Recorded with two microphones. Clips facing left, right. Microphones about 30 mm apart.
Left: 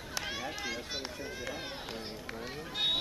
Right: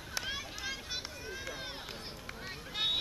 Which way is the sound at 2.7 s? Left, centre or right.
Centre.